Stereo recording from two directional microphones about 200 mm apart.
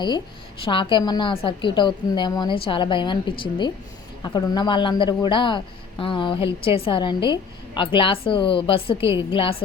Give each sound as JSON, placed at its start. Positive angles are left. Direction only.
{"t": 0.6, "sound": "a man's voice", "side_deg": 25}